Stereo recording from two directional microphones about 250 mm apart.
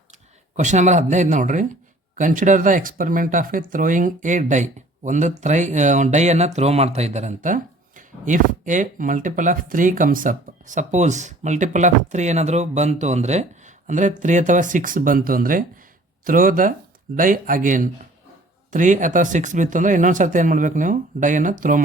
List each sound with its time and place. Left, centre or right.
0.5 s speech: right